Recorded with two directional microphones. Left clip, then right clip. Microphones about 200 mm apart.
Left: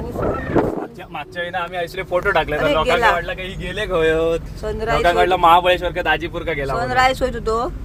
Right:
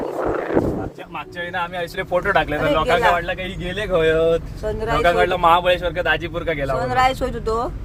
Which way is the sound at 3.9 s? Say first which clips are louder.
Right 1 dB; 45° left (ahead or behind).